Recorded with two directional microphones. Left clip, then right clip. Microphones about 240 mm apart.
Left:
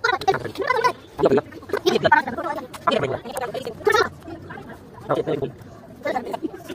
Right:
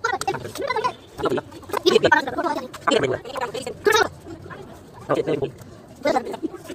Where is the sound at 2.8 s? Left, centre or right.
Centre.